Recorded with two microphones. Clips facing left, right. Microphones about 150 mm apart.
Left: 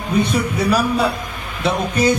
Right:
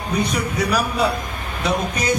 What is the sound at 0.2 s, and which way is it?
Speech, 25° left (ahead or behind).